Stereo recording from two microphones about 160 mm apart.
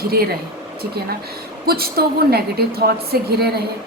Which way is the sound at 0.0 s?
70° right (ahead or behind).